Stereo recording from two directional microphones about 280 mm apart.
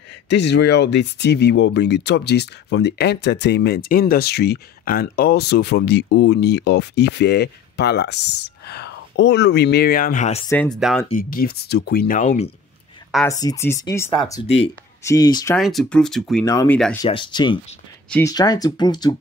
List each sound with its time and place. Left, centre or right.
0.3 s speech: left
10.5 s speech: centre
11.1 s speech: left
13.1 s speech: centre
14.3 s speech: left
15.5 s speech: centre